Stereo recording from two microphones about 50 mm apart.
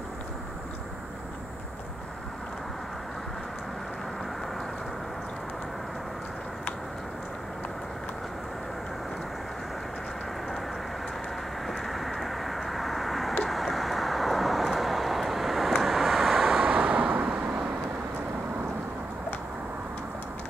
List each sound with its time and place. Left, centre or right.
11.6 s vehicle: centre
16.6 s vehicle: right